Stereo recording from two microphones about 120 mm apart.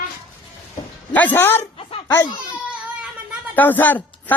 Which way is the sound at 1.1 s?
15° left (ahead or behind).